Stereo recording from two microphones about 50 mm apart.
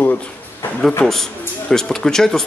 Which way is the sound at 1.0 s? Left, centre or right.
Centre.